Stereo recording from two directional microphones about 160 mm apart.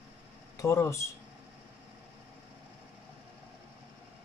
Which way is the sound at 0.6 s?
20° left (ahead or behind).